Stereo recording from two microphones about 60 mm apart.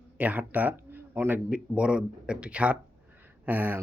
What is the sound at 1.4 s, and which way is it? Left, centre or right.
Speech, centre.